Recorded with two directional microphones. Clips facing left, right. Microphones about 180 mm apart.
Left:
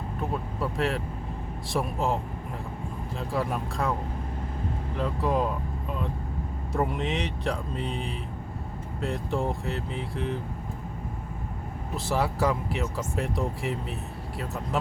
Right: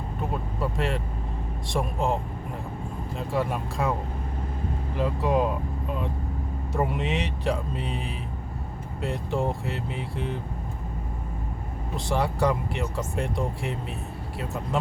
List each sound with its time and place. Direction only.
0.6 s speech: centre (ahead or behind)
3.2 s speech: centre (ahead or behind)
4.9 s speech: centre (ahead or behind)
6.7 s speech: centre (ahead or behind)
11.9 s speech: 5° left (ahead or behind)